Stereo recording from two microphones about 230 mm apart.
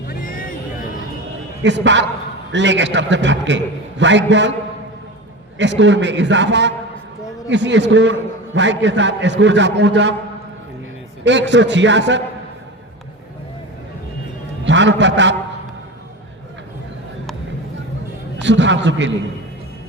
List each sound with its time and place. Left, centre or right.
0.1 s music: left
1.6 s a man's voice: right
5.5 s a man's voice: right
11.3 s a man's voice: right
14.6 s a man's voice: right
18.3 s a man's voice: right